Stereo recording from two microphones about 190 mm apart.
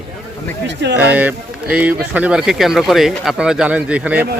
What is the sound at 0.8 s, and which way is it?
Speech, 65° right (ahead or behind).